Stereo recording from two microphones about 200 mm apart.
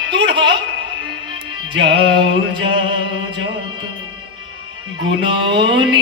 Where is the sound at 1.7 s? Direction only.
25° right (ahead or behind).